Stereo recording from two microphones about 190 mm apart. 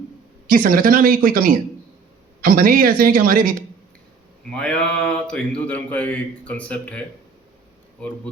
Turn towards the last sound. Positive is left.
turn(degrees=5)  # may be behind; listen again after turning